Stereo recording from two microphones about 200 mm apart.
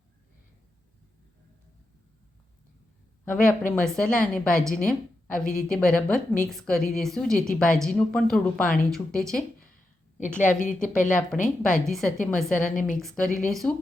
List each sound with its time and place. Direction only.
3.2 s a woman's voice: 5° left (ahead or behind)
10.2 s a woman's voice: 40° left (ahead or behind)
11.3 s a woman's voice: centre (ahead or behind)
12.5 s a woman's voice: 40° left (ahead or behind)
13.0 s a woman's voice: centre (ahead or behind)